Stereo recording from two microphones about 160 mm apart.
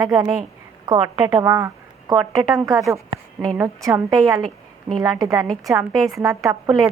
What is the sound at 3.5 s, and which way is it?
Speech, 20° right (ahead or behind).